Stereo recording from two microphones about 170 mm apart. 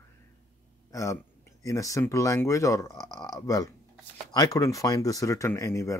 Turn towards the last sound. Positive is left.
turn(degrees=20)  # may be behind; listen again after turning